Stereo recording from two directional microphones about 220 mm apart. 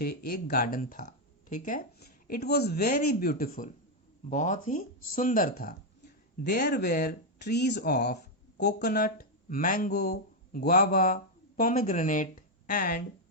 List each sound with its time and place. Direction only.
0.0 s speech: 45° left (ahead or behind)